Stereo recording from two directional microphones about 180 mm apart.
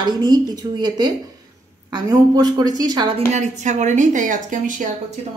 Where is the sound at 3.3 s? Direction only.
40° right (ahead or behind).